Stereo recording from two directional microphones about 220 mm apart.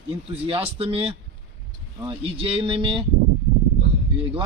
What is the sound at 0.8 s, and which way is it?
A man's voice, 25° right (ahead or behind).